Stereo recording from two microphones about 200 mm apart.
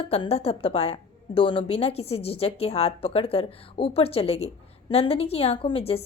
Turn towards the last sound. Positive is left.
turn(degrees=30)  # may be behind; listen again after turning